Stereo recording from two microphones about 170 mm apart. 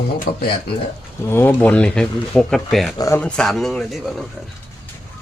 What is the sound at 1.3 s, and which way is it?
Speech, 10° left (ahead or behind).